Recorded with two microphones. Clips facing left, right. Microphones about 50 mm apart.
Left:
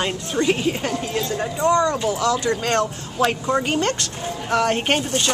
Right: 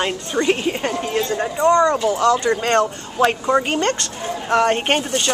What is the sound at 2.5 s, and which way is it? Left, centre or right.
Speech, centre.